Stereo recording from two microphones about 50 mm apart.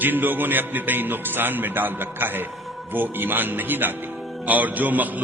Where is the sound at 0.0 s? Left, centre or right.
Right.